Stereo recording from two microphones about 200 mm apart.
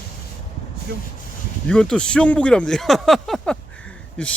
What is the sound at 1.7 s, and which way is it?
Speech, 5° left (ahead or behind).